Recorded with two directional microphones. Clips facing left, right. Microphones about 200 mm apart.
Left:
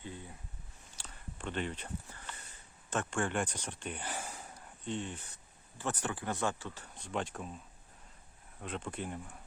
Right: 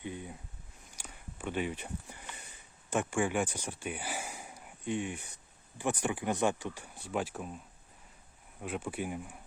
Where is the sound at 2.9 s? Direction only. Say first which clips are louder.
Right 3 dB; 10° right (ahead or behind).